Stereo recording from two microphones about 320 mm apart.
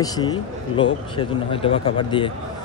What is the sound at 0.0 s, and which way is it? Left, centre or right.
Speech, centre.